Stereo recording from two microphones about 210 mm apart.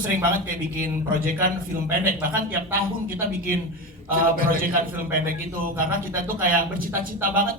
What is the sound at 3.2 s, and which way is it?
A man's voice, 45° right (ahead or behind).